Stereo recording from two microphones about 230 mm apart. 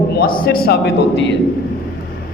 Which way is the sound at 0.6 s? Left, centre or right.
Left.